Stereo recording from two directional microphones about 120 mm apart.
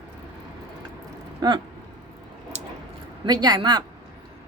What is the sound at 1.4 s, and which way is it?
Speech, 35° right (ahead or behind).